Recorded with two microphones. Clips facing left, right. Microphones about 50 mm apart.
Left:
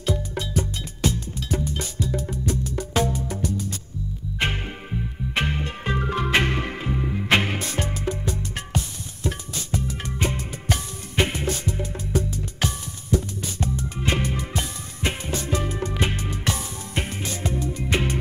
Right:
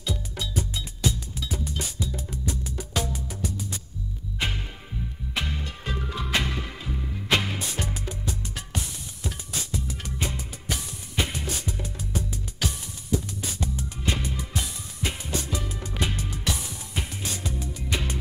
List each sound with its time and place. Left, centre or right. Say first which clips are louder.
0.0 s music: left 6 dB; left
5.3 s music: left 6 dB; left